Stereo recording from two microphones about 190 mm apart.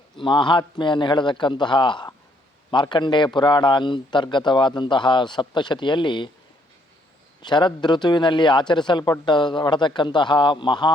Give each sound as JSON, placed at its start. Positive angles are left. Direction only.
{"t": 0.2, "sound": "a man's voice", "side_deg": 25}
{"t": 7.4, "sound": "a man's voice", "side_deg": 25}